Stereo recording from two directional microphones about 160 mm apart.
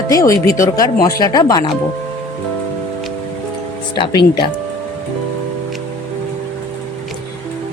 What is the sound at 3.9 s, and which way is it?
Speech, 30° left (ahead or behind).